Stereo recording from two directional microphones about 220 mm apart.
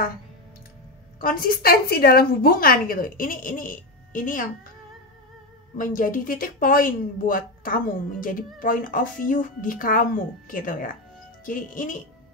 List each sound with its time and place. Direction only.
1.2 s a woman's voice: 40° left (ahead or behind)
5.8 s a woman's voice: 40° left (ahead or behind)